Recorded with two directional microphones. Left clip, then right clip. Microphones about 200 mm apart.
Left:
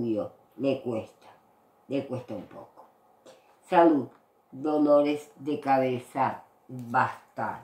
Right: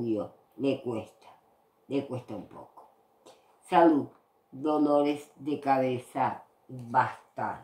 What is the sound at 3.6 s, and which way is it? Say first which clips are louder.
A woman's voice: left 1 dB; 15° right (ahead or behind).